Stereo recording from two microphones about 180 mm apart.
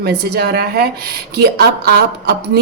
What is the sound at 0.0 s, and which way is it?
A woman's voice, 60° right (ahead or behind).